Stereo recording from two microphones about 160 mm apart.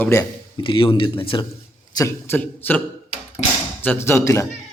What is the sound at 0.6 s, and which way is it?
Speech, 30° left (ahead or behind).